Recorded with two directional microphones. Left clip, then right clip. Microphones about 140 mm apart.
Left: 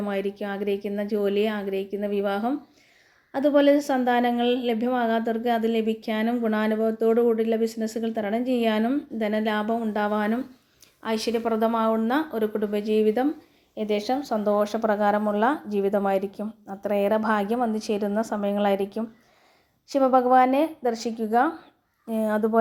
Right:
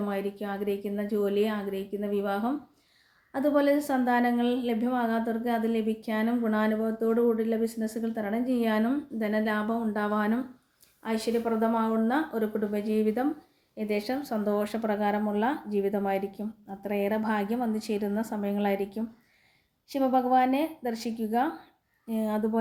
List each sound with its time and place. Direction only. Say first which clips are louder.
0.0 s a woman's voice: left 4 dB; 10° left (ahead or behind)
11.0 s a woman's voice: left 3 dB; 20° left (ahead or behind)